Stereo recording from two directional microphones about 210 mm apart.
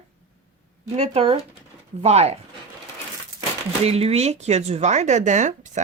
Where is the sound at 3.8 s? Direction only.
30° right (ahead or behind).